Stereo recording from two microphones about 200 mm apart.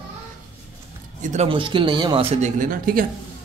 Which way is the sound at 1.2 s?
35° right (ahead or behind).